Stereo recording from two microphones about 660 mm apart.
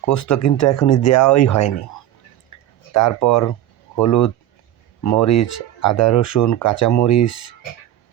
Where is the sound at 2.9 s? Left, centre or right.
Left.